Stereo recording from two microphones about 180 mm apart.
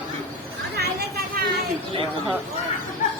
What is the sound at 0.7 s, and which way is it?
Chatter, 65° right (ahead or behind).